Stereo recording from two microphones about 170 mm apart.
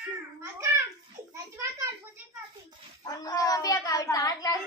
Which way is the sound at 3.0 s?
20° left (ahead or behind).